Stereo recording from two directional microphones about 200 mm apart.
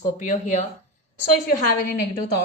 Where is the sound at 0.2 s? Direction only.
40° left (ahead or behind).